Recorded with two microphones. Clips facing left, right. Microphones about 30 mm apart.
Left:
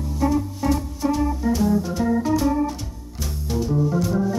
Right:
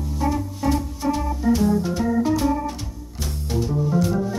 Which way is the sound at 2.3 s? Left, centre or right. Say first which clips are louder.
Even; centre.